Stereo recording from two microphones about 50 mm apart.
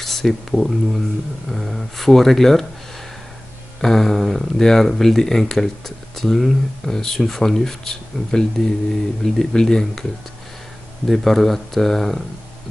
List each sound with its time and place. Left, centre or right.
0.0 s speech: centre
3.8 s speech: centre
11.1 s speech: centre